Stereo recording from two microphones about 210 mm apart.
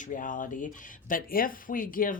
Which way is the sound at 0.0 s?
40° left (ahead or behind).